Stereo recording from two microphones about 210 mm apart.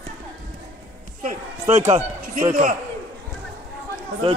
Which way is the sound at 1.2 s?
35° right (ahead or behind).